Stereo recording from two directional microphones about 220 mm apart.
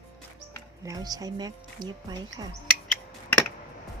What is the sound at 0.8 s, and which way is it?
Speech, 15° right (ahead or behind).